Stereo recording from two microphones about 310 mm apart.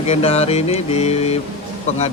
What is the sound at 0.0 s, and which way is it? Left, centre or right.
Mantra, centre.